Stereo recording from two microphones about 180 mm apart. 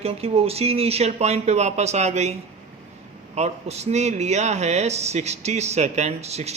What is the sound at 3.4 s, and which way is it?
Speech, 35° right (ahead or behind).